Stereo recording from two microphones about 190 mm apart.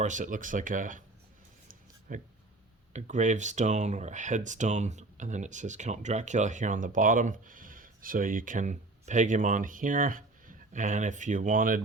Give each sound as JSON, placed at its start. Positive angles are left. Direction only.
{"t": 0.0, "sound": "speech", "side_deg": -40}
{"t": 2.1, "sound": "speech", "side_deg": -45}